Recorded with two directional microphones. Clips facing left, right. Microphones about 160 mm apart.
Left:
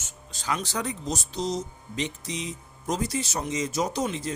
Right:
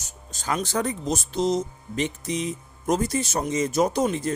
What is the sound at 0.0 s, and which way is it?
Speech, 45° right (ahead or behind).